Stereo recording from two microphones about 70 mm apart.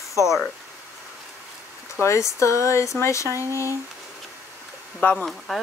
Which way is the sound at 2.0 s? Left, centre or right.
Left.